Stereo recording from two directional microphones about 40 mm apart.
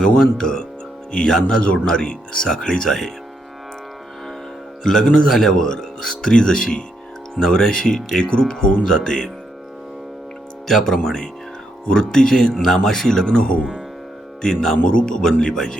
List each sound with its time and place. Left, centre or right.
0.0 s speech: centre
1.6 s speech: left
1.9 s speech: centre
4.8 s speech: centre
10.7 s speech: centre
13.2 s speech: left
14.4 s speech: centre
14.8 s speech: left